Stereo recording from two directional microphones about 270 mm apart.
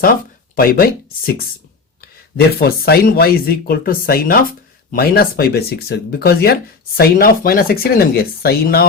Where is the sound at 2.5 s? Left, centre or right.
Left.